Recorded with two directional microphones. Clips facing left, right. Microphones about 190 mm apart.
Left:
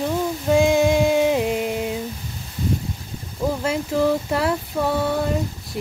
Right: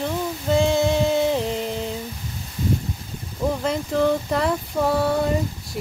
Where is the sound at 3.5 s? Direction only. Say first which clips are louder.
Even; 5° left (ahead or behind).